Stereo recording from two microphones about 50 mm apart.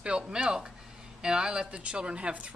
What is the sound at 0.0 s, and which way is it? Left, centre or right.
A woman's voice, centre.